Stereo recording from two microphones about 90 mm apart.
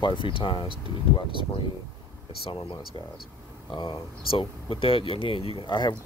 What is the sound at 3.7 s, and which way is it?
Speech, 60° left (ahead or behind).